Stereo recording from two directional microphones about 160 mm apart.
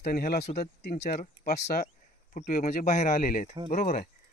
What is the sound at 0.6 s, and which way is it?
Speech, 90° left.